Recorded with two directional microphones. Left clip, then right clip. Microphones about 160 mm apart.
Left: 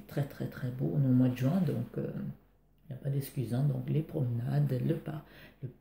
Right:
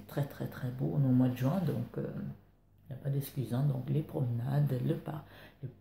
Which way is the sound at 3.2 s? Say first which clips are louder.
Left 1 dB; 25° left (ahead or behind).